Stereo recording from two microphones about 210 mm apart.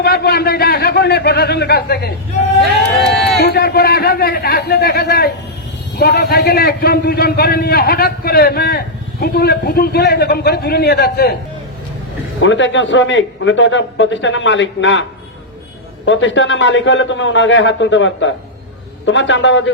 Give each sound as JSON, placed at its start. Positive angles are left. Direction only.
{"t": 0.0, "sound": "a man's voice", "side_deg": 50}
{"t": 3.4, "sound": "a man's voice", "side_deg": 50}
{"t": 12.4, "sound": "a man's voice", "side_deg": 65}
{"t": 16.0, "sound": "a man's voice", "side_deg": 60}